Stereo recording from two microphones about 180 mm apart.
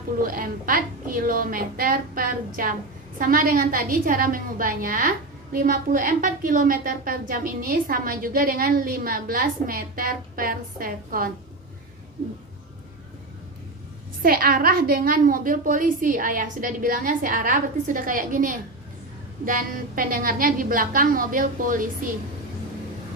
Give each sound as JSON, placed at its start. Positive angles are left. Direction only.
{"t": 0.2, "sound": "a woman's voice", "side_deg": -50}
{"t": 14.2, "sound": "a woman's voice", "side_deg": -55}